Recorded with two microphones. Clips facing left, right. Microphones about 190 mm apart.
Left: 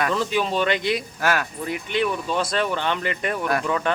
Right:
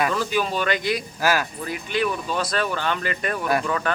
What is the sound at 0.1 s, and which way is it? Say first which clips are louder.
Speech: left 1 dB; 25° left (ahead or behind).